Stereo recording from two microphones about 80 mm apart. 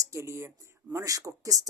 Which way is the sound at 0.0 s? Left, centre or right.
Right.